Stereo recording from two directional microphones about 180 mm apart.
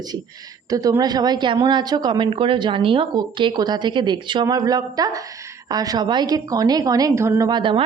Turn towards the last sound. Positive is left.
turn(degrees=-25)  # may be behind; listen again after turning